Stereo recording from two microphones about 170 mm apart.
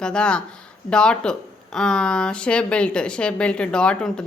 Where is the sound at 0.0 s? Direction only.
5° left (ahead or behind).